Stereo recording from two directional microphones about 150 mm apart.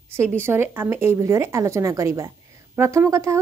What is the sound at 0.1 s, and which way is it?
Speech, 15° right (ahead or behind).